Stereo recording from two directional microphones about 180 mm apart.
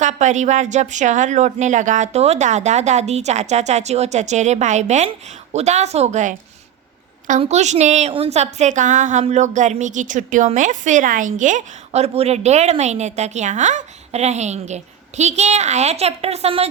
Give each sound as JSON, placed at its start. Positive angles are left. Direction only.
{"t": 0.0, "sound": "a woman's voice", "side_deg": -40}